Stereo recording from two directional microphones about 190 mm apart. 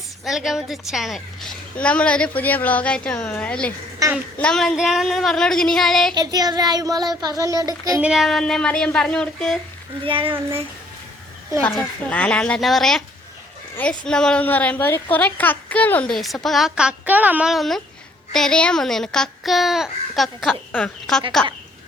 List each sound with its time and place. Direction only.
0.3 s a woman's voice: centre (ahead or behind)
6.1 s child singing: 20° right (ahead or behind)
7.3 s speech: 15° right (ahead or behind)
8.0 s a woman's voice: centre (ahead or behind)
10.1 s child singing: 30° right (ahead or behind)
11.6 s a woman's voice: 5° left (ahead or behind)